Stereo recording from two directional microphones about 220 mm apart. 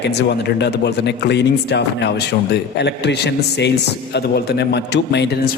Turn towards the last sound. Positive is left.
turn(degrees=50)  # may be behind; listen again after turning